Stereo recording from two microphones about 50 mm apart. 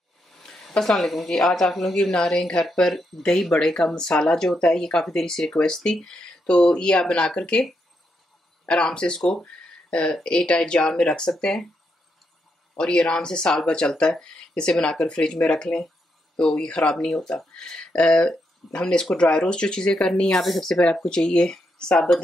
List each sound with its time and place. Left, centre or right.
0.3 s a sound: centre
0.8 s speech: centre
8.6 s speech: centre
9.4 s a sound: left
10.2 s speech: left
12.7 s speech: left